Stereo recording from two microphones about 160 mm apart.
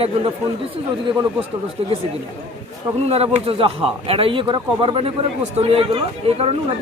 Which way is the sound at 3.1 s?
40° right (ahead or behind).